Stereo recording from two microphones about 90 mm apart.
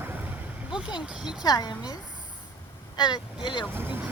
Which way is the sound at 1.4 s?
50° left (ahead or behind).